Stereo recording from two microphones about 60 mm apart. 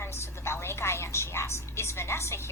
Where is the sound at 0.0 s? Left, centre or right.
Left.